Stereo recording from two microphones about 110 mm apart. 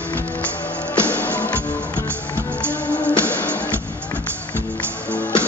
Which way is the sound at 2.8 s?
10° left (ahead or behind).